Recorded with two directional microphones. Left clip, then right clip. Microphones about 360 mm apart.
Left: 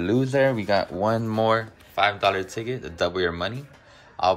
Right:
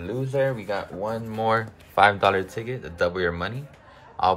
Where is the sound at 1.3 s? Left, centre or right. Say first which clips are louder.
Left 2 dB; centre.